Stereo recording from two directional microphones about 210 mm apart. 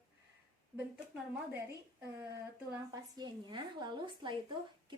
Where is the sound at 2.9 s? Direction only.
20° right (ahead or behind).